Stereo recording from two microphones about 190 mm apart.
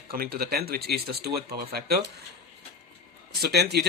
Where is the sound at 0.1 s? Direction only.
55° right (ahead or behind).